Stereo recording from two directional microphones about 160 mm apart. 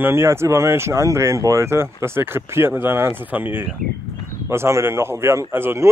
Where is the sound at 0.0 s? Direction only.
15° right (ahead or behind).